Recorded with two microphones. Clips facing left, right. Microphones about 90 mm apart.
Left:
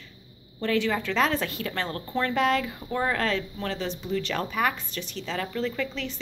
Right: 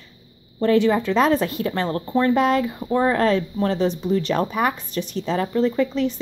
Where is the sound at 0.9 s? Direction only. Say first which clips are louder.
Right 6 dB; 20° right (ahead or behind).